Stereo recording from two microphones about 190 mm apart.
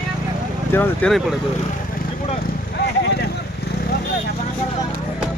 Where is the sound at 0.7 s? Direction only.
10° left (ahead or behind).